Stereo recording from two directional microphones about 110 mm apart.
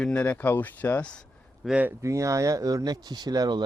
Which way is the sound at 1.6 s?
10° right (ahead or behind).